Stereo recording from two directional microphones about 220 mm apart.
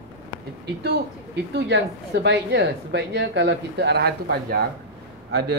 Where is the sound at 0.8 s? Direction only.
50° right (ahead or behind).